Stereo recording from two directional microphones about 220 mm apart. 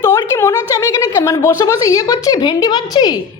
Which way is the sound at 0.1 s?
10° left (ahead or behind).